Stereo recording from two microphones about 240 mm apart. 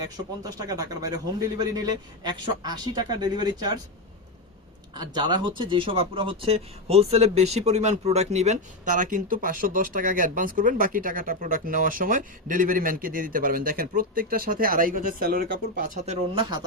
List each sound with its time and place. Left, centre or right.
0.4 s a man's voice: centre
4.9 s speech: centre; by 16.1 s right
16.3 s speech: right